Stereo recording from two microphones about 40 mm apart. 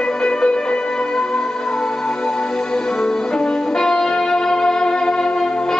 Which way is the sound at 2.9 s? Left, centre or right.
Centre.